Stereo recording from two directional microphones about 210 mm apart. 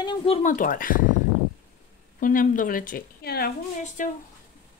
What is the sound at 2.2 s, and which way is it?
A woman's voice, 40° left (ahead or behind).